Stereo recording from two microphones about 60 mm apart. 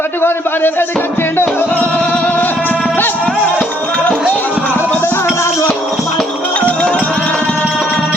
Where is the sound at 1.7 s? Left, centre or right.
Left.